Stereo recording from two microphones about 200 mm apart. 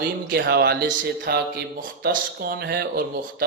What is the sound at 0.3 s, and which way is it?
Speech, 65° right (ahead or behind).